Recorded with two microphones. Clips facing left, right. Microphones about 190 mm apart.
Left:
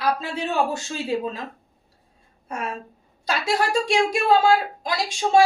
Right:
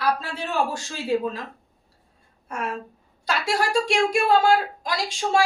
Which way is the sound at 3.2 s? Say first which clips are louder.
Left 1 dB; 20° left (ahead or behind).